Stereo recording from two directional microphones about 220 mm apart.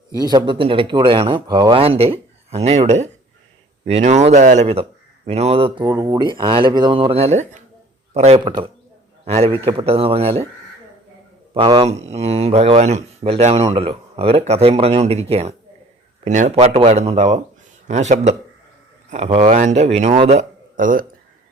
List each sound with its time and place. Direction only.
0.1 s speech: 20° right (ahead or behind)
11.5 s a man's voice: 25° right (ahead or behind)